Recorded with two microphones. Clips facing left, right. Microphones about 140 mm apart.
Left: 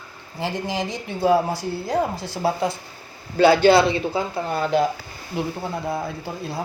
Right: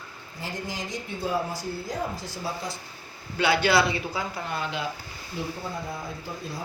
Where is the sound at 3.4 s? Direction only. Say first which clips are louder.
Left 8 dB; 35° left (ahead or behind).